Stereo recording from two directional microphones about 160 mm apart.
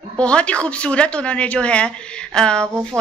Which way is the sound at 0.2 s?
5° left (ahead or behind).